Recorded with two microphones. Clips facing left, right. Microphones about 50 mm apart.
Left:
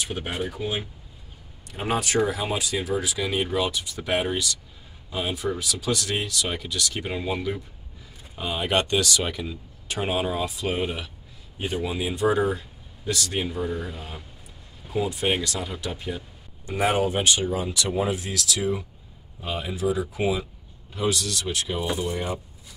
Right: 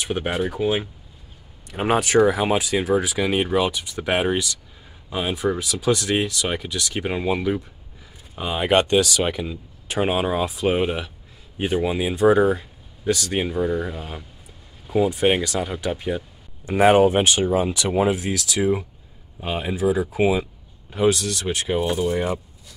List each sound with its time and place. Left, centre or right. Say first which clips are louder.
0.0 s speech: right 6 dB; right
8.4 s speech: right 5 dB; right
14.9 s speech: right 6 dB; right
18.1 s speech: right 4 dB; right